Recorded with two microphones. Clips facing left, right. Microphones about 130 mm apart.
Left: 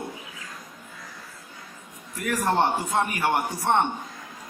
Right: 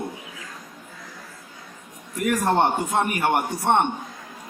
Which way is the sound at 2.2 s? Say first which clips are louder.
Right 3 dB; 20° right (ahead or behind).